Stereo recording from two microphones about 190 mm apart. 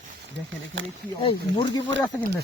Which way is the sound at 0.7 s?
75° right (ahead or behind).